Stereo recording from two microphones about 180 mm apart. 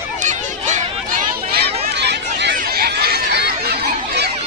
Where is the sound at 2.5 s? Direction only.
55° right (ahead or behind).